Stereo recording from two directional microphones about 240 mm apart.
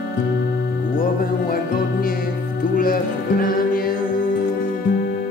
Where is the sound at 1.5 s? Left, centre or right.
Left.